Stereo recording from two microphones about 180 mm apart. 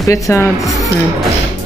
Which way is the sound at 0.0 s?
15° left (ahead or behind).